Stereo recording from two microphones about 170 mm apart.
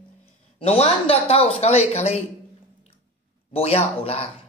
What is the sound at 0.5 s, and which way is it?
Speech, 35° left (ahead or behind).